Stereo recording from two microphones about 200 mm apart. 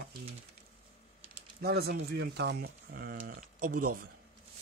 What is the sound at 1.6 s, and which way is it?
Speech, 55° right (ahead or behind).